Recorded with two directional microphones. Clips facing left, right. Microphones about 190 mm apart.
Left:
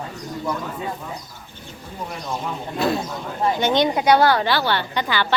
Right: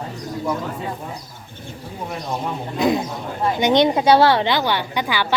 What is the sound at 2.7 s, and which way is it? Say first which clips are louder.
Speech: right 3 dB; 15° right (ahead or behind).